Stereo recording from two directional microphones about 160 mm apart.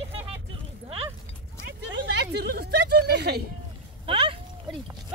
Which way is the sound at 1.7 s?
90° right.